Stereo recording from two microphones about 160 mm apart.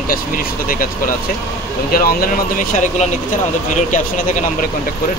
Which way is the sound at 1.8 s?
65° left (ahead or behind).